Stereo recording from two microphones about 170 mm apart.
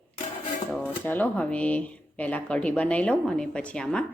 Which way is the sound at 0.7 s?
10° left (ahead or behind).